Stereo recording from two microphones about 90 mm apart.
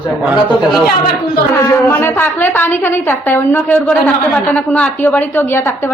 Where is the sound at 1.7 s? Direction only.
30° left (ahead or behind).